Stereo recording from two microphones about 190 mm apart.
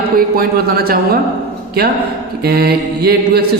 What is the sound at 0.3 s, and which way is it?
Speech, 55° right (ahead or behind).